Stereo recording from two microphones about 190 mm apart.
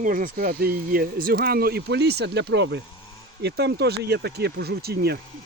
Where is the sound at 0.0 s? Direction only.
45° right (ahead or behind).